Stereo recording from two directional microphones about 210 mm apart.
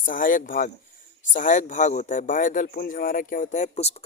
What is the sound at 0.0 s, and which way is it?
Speech, 40° left (ahead or behind).